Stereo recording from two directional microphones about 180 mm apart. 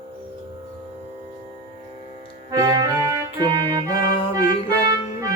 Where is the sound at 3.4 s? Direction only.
20° right (ahead or behind).